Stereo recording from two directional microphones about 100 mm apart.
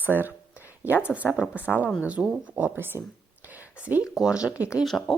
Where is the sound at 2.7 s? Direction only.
20° right (ahead or behind).